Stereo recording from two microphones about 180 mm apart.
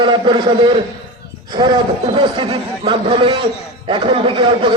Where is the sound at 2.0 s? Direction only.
30° right (ahead or behind).